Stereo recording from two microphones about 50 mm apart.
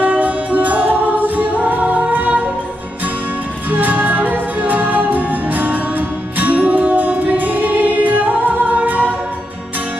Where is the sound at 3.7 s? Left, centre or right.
Right.